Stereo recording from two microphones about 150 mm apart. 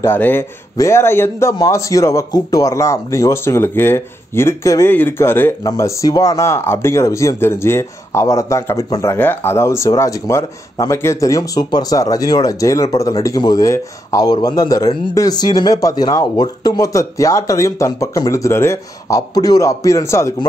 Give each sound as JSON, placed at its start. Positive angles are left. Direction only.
{"t": 0.0, "sound": "a man's voice", "side_deg": 15}